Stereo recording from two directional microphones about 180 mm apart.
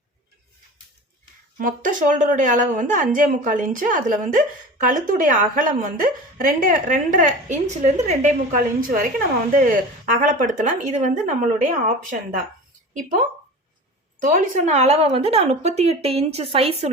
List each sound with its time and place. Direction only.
1.5 s a woman's voice: 50° right (ahead or behind)
10.2 s a woman's voice: 45° right (ahead or behind)
12.9 s a woman's voice: 45° right (ahead or behind)